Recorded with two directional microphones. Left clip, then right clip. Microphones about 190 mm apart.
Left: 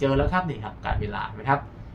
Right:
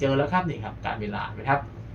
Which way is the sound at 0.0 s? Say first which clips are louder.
Even; 20° left (ahead or behind).